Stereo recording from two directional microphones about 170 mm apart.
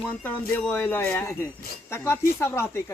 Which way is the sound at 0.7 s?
10° left (ahead or behind).